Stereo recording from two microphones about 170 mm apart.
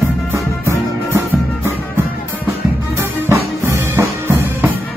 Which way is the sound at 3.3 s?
15° right (ahead or behind).